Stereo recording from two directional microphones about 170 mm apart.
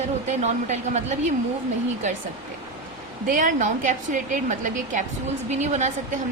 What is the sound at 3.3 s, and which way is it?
A woman's voice, 50° right (ahead or behind).